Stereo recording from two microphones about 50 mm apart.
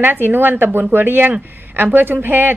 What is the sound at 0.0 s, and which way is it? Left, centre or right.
A woman's voice, right.